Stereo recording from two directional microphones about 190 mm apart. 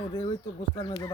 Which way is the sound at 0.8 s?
25° left (ahead or behind).